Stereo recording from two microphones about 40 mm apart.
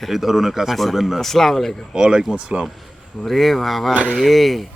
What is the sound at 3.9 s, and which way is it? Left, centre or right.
Speech, right.